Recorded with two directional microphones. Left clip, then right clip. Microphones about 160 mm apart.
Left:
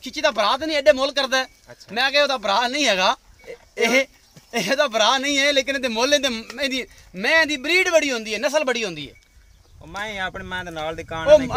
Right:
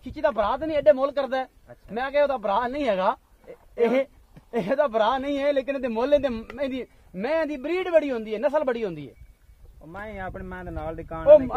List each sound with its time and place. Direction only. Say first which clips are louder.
0.0 s speech: left 4 dB; centre (ahead or behind)
3.4 s oink: left 2 dB; 35° left (ahead or behind)
3.9 s speech: left 5 dB; 5° right (ahead or behind)
9.8 s speech: left 8 dB; 30° left (ahead or behind)